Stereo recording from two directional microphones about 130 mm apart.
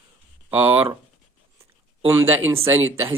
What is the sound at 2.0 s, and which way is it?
Speech, 20° right (ahead or behind).